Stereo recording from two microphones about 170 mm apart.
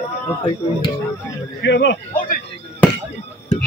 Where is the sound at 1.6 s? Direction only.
90° left.